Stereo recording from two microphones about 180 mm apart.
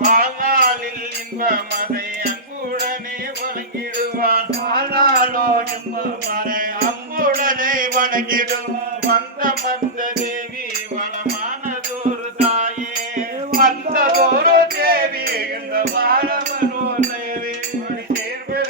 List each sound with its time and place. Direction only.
0.0 s music: 50° right (ahead or behind)
4.2 s music: 55° right (ahead or behind)
12.4 s music: 40° right (ahead or behind)
13.1 s music: 50° right (ahead or behind)